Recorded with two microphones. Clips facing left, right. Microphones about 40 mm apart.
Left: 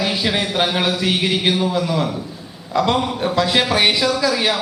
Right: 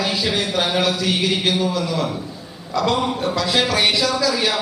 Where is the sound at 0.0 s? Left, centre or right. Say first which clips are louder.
Left 1 dB; centre.